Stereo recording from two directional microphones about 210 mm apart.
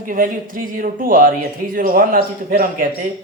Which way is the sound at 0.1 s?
40° right (ahead or behind).